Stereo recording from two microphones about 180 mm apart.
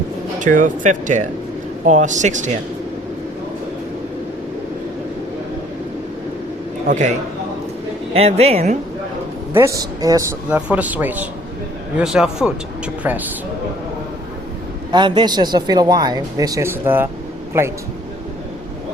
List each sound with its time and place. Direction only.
0.3 s speech: 45° right (ahead or behind)
6.8 s a man's voice: 45° right (ahead or behind)
8.1 s a woman's voice: 35° right (ahead or behind)
9.5 s speech: 15° right (ahead or behind)
14.9 s speech: 25° right (ahead or behind)